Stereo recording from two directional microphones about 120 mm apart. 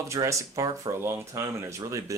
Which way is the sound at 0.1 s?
25° right (ahead or behind).